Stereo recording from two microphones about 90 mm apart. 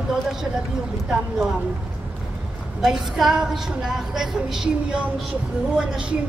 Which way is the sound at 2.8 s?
5° right (ahead or behind).